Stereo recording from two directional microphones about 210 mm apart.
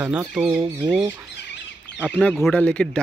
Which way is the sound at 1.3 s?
55° left (ahead or behind).